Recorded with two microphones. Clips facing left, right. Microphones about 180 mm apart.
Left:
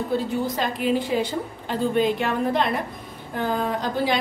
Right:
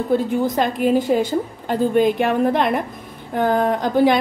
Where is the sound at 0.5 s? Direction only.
50° right (ahead or behind).